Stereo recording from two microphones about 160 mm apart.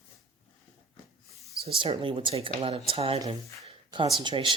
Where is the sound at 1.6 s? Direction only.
35° right (ahead or behind).